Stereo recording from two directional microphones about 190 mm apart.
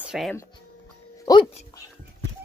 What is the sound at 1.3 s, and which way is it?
Speech, 20° left (ahead or behind).